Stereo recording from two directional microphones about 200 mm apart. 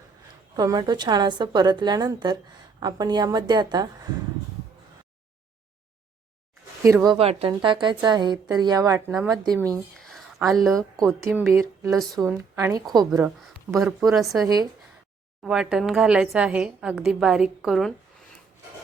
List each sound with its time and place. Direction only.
0.5 s a woman's voice: 20° right (ahead or behind)
6.8 s a woman's voice: 20° right (ahead or behind)
10.1 s a sound: centre (ahead or behind)
10.6 s a woman's voice: centre (ahead or behind)
11.3 s a woman's voice: 10° right (ahead or behind)
13.7 s a woman's voice: centre (ahead or behind)
14.4 s a woman's voice: 20° right (ahead or behind)
15.4 s a woman's voice: centre (ahead or behind)